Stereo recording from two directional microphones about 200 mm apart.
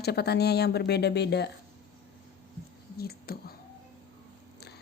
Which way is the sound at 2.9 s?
50° left (ahead or behind).